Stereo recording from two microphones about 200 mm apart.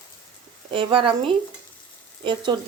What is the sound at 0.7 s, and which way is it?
A woman's voice, 25° right (ahead or behind).